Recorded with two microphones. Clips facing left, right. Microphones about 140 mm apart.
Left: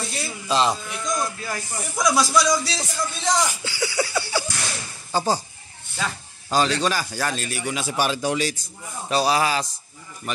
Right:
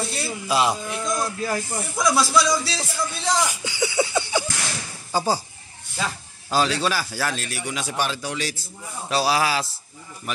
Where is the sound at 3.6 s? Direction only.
20° right (ahead or behind).